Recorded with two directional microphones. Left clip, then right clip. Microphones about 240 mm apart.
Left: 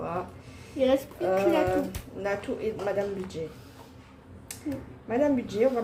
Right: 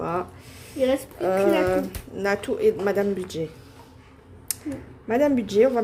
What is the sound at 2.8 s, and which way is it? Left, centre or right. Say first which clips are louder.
Speech: right 6 dB; right.